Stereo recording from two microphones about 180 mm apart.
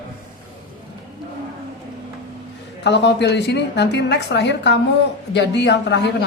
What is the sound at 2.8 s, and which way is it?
A woman's voice, 75° left (ahead or behind).